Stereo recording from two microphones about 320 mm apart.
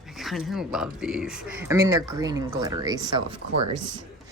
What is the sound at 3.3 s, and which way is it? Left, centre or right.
Speech, right.